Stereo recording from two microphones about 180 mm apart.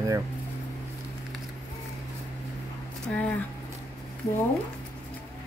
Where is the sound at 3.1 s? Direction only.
5° left (ahead or behind).